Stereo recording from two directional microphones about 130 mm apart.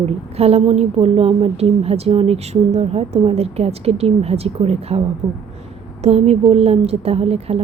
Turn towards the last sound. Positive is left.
turn(degrees=-50)  # may be behind; listen again after turning